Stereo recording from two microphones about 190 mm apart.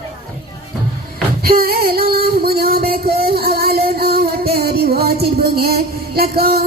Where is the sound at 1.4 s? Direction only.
50° right (ahead or behind).